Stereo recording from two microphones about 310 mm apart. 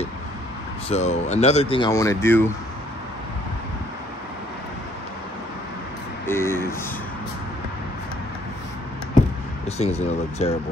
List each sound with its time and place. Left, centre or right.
0.8 s speech: left
6.2 s a sound: centre
9.8 s speech: left